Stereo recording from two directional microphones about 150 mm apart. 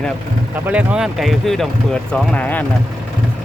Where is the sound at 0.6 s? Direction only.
10° right (ahead or behind); by 2.6 s 10° left (ahead or behind).